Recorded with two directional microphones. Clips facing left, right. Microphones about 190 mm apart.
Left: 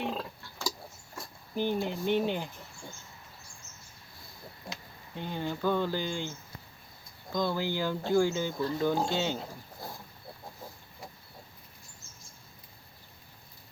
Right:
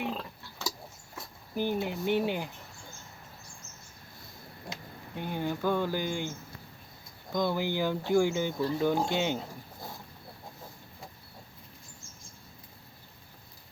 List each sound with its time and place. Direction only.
0.1 s a sound: 5° left (ahead or behind)
1.1 s speech: 5° right (ahead or behind)
5.1 s speech: 15° right (ahead or behind)
7.3 s speech: 15° right (ahead or behind)